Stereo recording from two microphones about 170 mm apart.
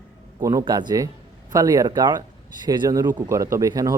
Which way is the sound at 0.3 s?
25° right (ahead or behind).